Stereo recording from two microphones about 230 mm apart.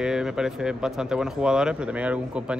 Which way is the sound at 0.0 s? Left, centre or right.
Centre.